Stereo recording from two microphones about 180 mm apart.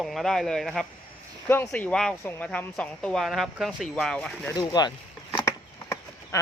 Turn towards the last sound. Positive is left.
turn(degrees=15)  # may be behind; listen again after turning